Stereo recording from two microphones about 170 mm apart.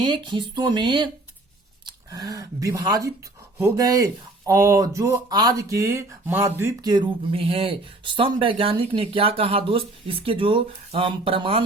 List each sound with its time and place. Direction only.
0.0 s speech: 30° right (ahead or behind)